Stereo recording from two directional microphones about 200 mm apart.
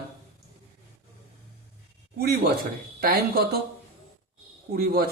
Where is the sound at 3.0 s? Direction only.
50° right (ahead or behind).